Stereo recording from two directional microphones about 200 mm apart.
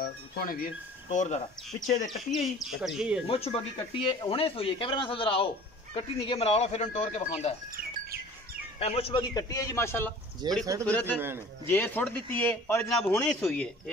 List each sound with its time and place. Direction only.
0.0 s speech: 45° left (ahead or behind)
2.0 s speech: centre (ahead or behind)
3.3 s speech: 30° left (ahead or behind)
8.7 s a man's voice: 30° left (ahead or behind); by 10.1 s 10° left (ahead or behind)
10.4 s speech: 20° right (ahead or behind)
10.9 s a man's voice: 10° left (ahead or behind)
11.1 s a man's voice: 10° right (ahead or behind)
11.6 s a man's voice: 10° left (ahead or behind)